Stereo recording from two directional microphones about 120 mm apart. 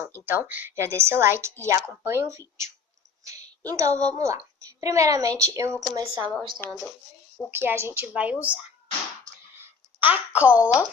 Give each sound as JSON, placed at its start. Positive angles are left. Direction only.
{"t": 0.3, "sound": "a child's voice", "side_deg": -15}
{"t": 3.7, "sound": "a child's voice", "side_deg": -25}
{"t": 5.9, "sound": "a woman's voice", "side_deg": -35}
{"t": 6.6, "sound": "speech", "side_deg": 15}
{"t": 7.5, "sound": "a woman's voice", "side_deg": -15}
{"t": 10.0, "sound": "a woman's voice", "side_deg": -15}